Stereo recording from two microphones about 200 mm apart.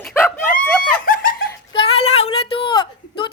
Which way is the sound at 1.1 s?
45° left (ahead or behind).